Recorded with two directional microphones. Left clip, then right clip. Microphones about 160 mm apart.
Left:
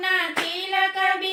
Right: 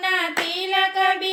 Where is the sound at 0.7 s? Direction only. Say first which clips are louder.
Right 2 dB; 35° right (ahead or behind).